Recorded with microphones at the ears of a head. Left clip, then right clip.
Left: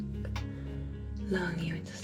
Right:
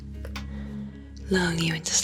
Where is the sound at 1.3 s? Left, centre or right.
Right.